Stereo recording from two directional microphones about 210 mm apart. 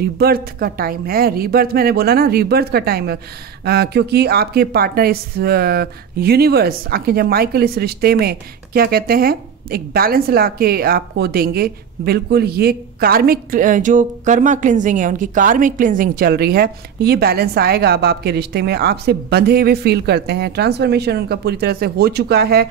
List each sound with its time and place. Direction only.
0.2 s speech: 45° right (ahead or behind)